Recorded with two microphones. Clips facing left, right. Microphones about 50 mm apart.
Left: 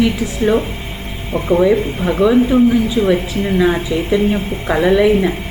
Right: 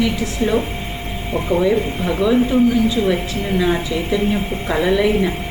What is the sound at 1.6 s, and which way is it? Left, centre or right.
Speech, centre.